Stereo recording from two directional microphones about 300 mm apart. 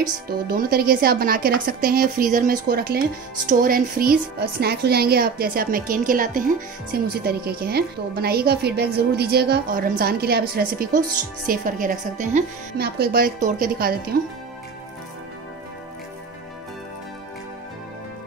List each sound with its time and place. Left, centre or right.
0.5 s a woman's voice: right